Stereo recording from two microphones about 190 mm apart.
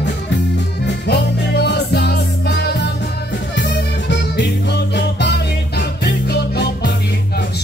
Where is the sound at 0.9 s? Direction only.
60° left (ahead or behind).